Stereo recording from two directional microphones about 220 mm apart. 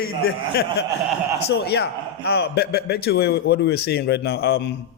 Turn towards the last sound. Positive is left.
turn(degrees=45)  # may be behind; listen again after turning